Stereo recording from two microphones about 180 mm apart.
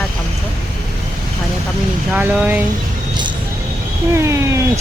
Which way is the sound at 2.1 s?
10° right (ahead or behind).